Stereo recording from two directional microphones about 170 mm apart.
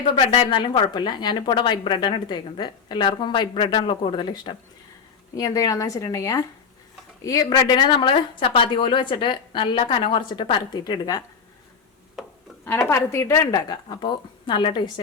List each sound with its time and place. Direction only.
0.2 s a woman's voice: 30° left (ahead or behind)
12.9 s a woman's voice: 15° left (ahead or behind)